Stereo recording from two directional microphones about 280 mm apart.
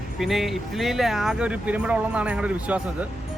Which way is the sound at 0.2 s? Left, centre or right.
Centre.